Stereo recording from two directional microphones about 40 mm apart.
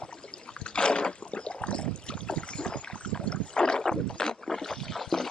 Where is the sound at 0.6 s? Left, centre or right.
Left.